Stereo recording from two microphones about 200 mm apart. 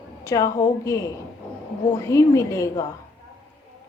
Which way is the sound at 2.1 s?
15° left (ahead or behind).